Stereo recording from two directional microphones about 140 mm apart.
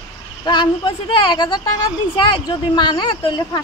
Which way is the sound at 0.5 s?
35° left (ahead or behind).